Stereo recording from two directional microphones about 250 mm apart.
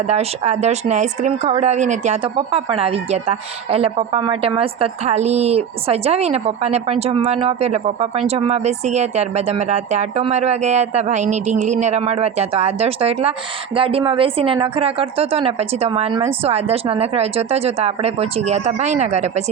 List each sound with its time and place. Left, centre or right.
0.1 s speech: right